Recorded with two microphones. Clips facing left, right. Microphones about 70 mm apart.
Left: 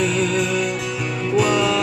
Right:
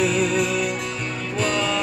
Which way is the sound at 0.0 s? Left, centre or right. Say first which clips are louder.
Left 1 dB; centre.